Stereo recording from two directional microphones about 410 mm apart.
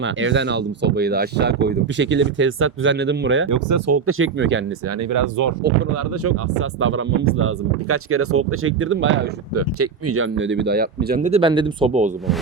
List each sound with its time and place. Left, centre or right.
0.0 s speech: right
3.5 s speech: right
5.1 s speech: right
6.2 s speech: right; by 12.1 s centre